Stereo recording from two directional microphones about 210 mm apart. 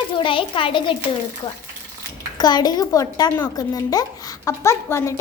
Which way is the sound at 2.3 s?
20° left (ahead or behind).